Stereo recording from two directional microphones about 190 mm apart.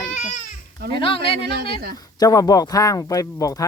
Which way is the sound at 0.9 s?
25° left (ahead or behind).